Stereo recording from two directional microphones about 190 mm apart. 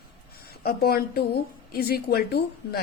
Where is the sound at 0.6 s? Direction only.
55° left (ahead or behind).